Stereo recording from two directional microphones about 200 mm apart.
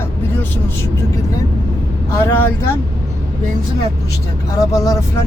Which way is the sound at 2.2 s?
10° left (ahead or behind).